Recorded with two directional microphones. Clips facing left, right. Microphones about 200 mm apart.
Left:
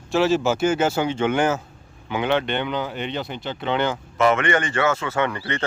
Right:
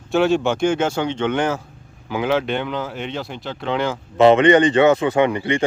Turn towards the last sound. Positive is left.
turn(degrees=-15)  # may be behind; listen again after turning